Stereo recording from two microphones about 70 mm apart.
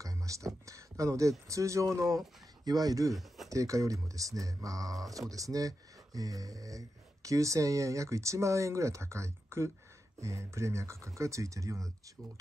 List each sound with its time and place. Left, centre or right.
0.0 s a sound: right
1.5 s speech: right
3.1 s speech: centre
3.4 s speech: right